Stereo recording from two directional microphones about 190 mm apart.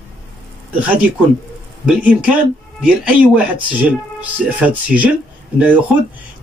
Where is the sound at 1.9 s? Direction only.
5° right (ahead or behind).